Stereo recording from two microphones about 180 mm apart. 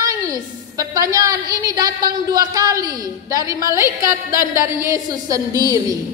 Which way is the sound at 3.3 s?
20° right (ahead or behind).